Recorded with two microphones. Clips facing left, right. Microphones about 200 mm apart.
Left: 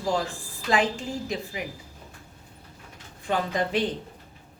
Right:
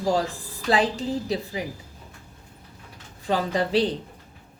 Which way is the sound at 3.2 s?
35° right (ahead or behind).